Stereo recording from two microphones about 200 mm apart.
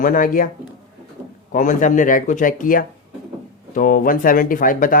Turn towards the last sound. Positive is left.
turn(degrees=45)  # may be behind; listen again after turning